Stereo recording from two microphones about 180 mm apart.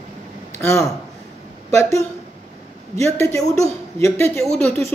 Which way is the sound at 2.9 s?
15° left (ahead or behind).